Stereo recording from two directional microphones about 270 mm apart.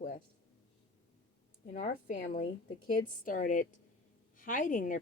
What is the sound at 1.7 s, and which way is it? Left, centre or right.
A woman's voice, left.